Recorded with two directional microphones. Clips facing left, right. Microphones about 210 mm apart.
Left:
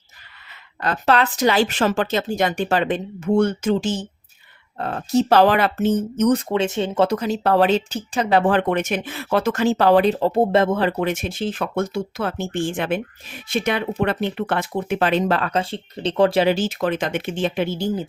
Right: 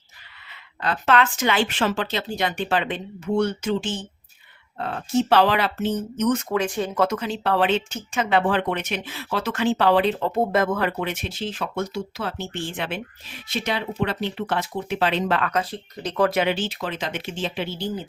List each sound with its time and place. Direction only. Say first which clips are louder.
0.8 s speech: left 2 dB; 40° left (ahead or behind)
6.5 s speech: left 3 dB; 25° left (ahead or behind)
7.2 s speech: left 5 dB; 45° left (ahead or behind)